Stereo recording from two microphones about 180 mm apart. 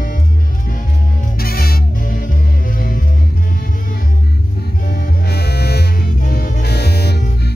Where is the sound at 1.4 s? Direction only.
55° left (ahead or behind).